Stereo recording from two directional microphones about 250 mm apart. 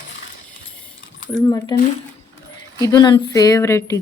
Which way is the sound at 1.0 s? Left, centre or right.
Left.